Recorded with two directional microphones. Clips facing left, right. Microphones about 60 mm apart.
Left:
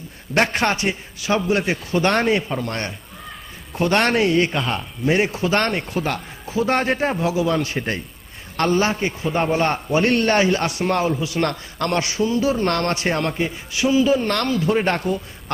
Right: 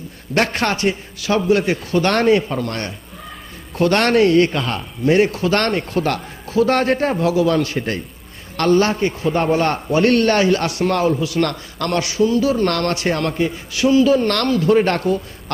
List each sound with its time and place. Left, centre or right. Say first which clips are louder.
0.3 s a man's voice: right 1 dB; centre
2.6 s a man's voice: right 1 dB; left